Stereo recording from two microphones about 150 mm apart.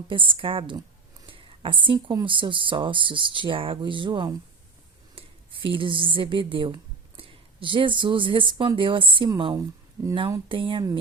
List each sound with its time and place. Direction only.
0.1 s speech: 35° right (ahead or behind)
9.6 s speech: 20° right (ahead or behind)
10.5 s speech: 35° right (ahead or behind)